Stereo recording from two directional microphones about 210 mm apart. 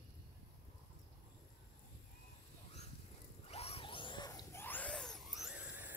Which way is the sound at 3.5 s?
30° left (ahead or behind).